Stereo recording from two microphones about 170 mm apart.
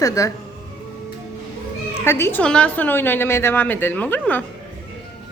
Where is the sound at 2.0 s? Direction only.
15° left (ahead or behind).